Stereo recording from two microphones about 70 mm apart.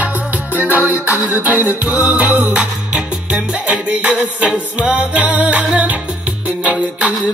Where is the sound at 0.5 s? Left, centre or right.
Right.